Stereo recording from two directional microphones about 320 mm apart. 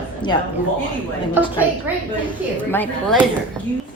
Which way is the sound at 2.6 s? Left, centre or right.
Centre.